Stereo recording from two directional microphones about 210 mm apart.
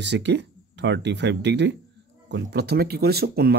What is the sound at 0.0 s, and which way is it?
Speech, 55° right (ahead or behind).